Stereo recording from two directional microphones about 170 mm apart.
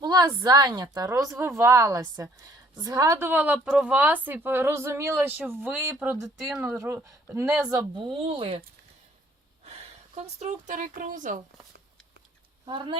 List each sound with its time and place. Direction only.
0.0 s a woman's voice: 25° right (ahead or behind)
9.6 s speech: 40° right (ahead or behind)
12.6 s a woman's voice: 30° right (ahead or behind)